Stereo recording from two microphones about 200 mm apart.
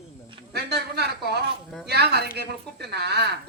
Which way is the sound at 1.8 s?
55° right (ahead or behind).